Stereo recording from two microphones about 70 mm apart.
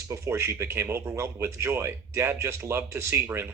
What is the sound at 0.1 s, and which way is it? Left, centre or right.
Speech, right.